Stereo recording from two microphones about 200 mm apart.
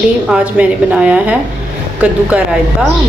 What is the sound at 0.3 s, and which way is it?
Speech, 5° right (ahead or behind).